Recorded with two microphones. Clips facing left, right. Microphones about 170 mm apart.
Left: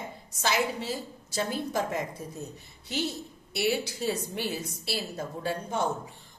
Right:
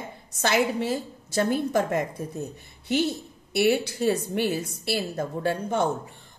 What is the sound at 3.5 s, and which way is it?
Speech, 55° right (ahead or behind).